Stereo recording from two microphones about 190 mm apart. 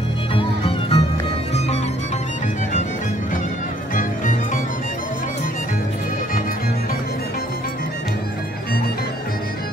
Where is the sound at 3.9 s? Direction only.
45° left (ahead or behind).